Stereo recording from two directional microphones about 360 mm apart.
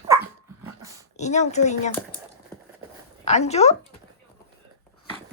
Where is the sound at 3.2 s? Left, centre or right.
Centre.